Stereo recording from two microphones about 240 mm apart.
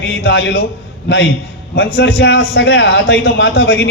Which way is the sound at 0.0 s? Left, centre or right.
Left.